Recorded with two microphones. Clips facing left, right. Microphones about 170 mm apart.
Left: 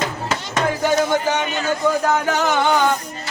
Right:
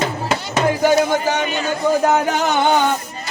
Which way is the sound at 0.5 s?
10° right (ahead or behind).